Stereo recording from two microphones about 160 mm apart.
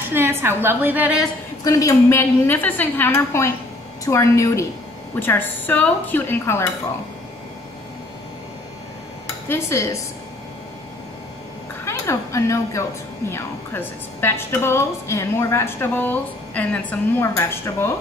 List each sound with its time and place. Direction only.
0.1 s a woman's voice: 15° right (ahead or behind)
1.6 s a woman's voice: 20° left (ahead or behind)
9.5 s a woman's voice: 15° left (ahead or behind)
11.8 s a woman's voice: 15° left (ahead or behind)